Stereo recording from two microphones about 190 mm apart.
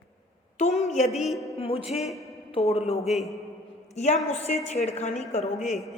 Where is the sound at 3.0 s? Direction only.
Centre (ahead or behind).